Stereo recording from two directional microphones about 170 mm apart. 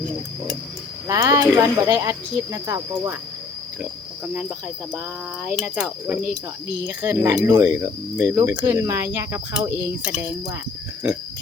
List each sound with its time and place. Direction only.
1.0 s speech: 20° right (ahead or behind)
5.5 s speech: 5° right (ahead or behind)